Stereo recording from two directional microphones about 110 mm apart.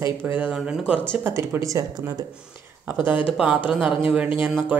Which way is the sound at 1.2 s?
25° right (ahead or behind).